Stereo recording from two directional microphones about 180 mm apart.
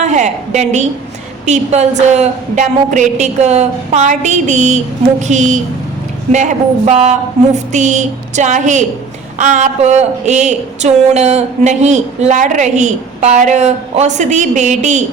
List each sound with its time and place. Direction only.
0.0 s a woman's voice: 40° right (ahead or behind)